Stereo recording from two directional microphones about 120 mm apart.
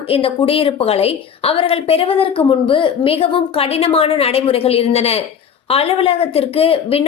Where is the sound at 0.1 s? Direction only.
50° left (ahead or behind).